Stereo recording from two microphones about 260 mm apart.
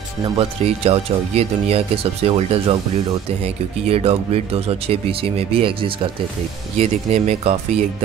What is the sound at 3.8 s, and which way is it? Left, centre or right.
Speech, right.